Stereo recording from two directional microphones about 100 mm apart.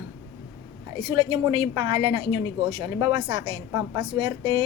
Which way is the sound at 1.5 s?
50° right (ahead or behind).